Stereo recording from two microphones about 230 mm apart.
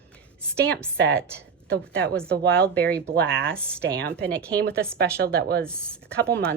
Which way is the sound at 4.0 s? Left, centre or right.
Right.